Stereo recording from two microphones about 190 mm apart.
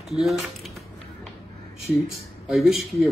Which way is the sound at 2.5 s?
Centre (ahead or behind).